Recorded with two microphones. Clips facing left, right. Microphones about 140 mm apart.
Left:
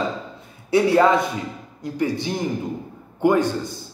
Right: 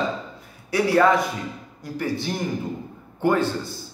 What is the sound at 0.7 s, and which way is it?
Speech, 20° left (ahead or behind).